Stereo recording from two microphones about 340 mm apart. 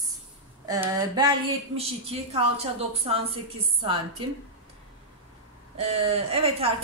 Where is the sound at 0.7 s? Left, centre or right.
Centre.